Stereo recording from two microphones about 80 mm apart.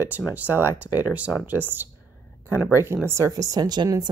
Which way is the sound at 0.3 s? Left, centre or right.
Right.